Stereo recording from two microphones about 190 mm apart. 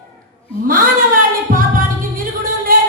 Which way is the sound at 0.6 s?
50° right (ahead or behind).